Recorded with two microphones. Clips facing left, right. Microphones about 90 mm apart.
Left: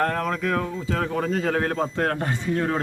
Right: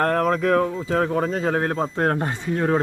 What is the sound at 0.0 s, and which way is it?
Speech, 45° right (ahead or behind).